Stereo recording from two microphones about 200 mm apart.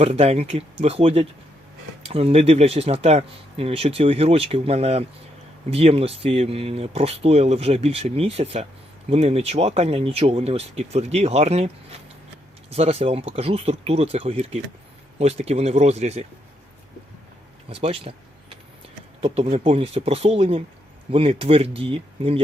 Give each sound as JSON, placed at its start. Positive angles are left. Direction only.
{"t": 0.0, "sound": "speech", "side_deg": -30}
{"t": 17.7, "sound": "speech", "side_deg": -30}